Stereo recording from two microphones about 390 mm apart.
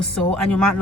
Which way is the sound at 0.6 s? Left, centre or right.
Right.